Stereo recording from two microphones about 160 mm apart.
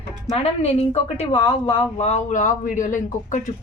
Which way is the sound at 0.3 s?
40° left (ahead or behind).